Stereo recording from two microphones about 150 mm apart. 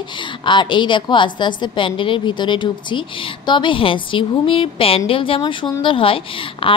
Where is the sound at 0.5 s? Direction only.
30° left (ahead or behind).